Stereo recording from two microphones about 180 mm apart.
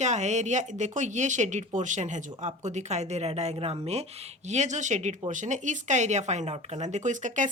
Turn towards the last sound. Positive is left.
turn(degrees=-45)  # may be behind; listen again after turning